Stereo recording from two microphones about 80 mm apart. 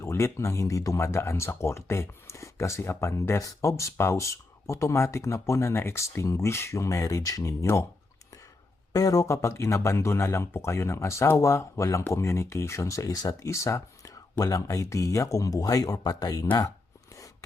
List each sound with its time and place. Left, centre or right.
0.0 s speech: left
8.9 s speech: left
14.3 s speech: left